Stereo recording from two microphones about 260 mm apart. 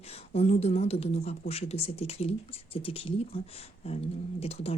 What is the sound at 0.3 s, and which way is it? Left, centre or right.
Speech, left.